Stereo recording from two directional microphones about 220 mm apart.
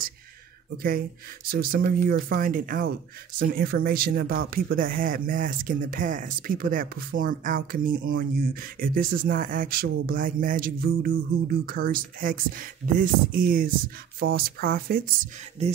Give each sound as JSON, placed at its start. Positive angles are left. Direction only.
{"t": 1.5, "sound": "speech", "side_deg": -40}